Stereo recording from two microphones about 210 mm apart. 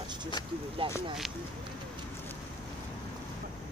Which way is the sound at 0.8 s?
25° right (ahead or behind).